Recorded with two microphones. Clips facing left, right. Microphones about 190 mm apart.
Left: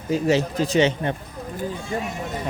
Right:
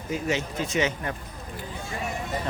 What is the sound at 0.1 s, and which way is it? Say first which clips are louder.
A man's voice: left 8 dB; 35° left (ahead or behind).